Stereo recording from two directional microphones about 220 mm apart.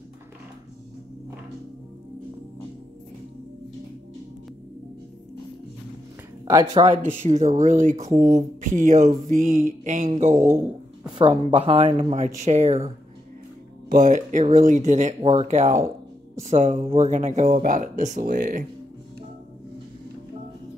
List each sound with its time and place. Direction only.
6.4 s speech: 15° right (ahead or behind)
7.2 s speech: 35° right (ahead or behind)
11.1 s speech: 25° right (ahead or behind)